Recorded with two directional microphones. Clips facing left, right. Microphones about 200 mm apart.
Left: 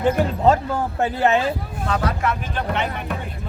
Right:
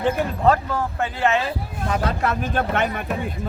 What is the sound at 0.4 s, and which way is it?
Speech, 25° left (ahead or behind).